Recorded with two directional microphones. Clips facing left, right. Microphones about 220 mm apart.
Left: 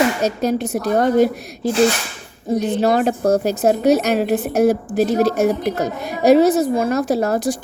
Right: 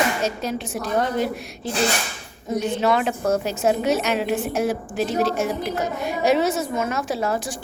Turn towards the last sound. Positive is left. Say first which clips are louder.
# left 7 dB
turn(degrees=40)  # may be behind; listen again after turning